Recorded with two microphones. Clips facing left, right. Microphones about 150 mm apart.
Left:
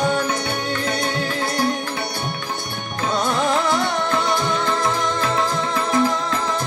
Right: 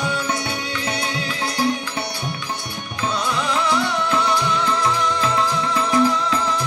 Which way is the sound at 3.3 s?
50° left (ahead or behind).